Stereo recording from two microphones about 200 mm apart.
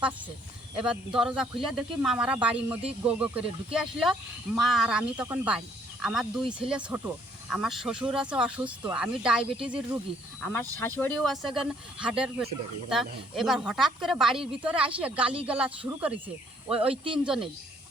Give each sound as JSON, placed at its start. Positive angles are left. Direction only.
{"t": 0.8, "sound": "speech", "side_deg": -5}
{"t": 10.4, "sound": "speech", "side_deg": 10}
{"t": 16.9, "sound": "speech", "side_deg": -25}
{"t": 17.2, "sound": "speech", "side_deg": -5}